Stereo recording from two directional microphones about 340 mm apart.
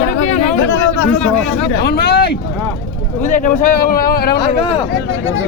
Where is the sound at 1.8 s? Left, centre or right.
Left.